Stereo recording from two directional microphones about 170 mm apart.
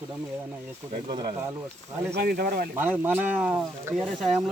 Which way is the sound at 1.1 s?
25° right (ahead or behind).